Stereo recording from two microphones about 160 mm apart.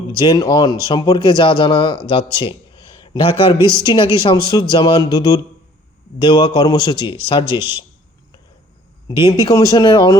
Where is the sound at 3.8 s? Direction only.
30° left (ahead or behind).